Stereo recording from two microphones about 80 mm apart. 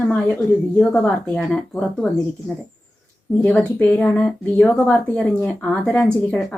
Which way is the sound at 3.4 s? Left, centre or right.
Centre.